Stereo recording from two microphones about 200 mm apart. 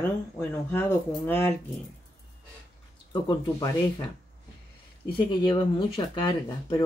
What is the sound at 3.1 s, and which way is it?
Speech, 20° left (ahead or behind).